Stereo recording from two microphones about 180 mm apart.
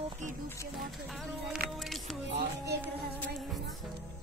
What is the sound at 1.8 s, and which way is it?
Music, centre (ahead or behind).